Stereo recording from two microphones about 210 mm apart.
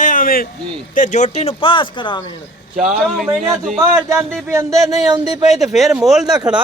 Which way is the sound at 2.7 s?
35° right (ahead or behind).